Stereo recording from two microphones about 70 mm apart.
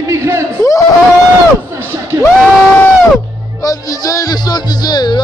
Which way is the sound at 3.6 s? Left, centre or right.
Left.